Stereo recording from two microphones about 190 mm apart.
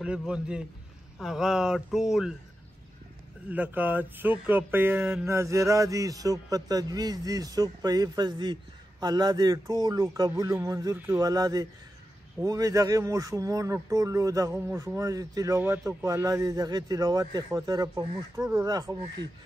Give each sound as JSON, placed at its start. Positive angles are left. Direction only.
{"t": 0.0, "sound": "speech", "side_deg": -5}
{"t": 3.4, "sound": "a man's voice", "side_deg": -10}